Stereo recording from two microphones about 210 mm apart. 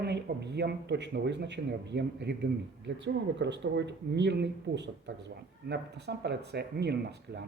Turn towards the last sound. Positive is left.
turn(degrees=-50)  # may be behind; listen again after turning